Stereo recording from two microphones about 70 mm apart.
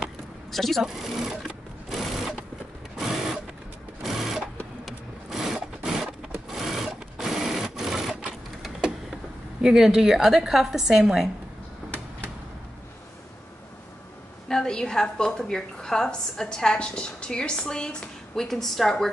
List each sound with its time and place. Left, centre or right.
0.5 s a woman's voice: centre
1.3 s sewing machine: centre
1.9 s sewing machine: centre
4.0 s sewing machine: centre
4.8 s vehicle: centre
6.5 s sewing machine: centre
8.2 s printer: centre
9.6 s a woman's voice: centre
14.5 s a woman's voice: centre